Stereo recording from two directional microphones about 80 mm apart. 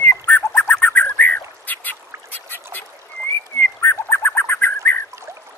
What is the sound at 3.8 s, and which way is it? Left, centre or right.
Bird, left.